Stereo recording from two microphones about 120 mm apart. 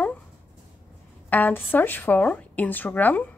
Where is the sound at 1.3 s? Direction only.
15° left (ahead or behind).